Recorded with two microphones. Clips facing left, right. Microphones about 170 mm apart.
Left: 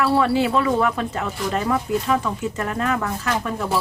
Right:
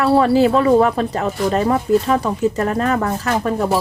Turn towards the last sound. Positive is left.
turn(degrees=-40)  # may be behind; listen again after turning